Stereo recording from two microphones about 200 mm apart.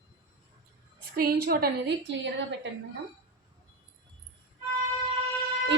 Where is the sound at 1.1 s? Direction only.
50° right (ahead or behind).